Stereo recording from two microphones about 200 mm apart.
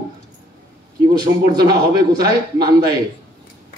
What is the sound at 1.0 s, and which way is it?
A man's voice, 20° right (ahead or behind).